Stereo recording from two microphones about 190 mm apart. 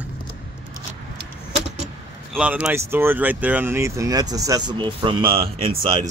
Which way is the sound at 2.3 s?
5° right (ahead or behind).